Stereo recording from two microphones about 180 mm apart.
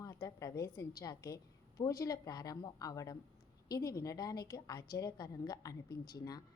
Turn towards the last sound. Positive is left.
turn(degrees=20)  # may be behind; listen again after turning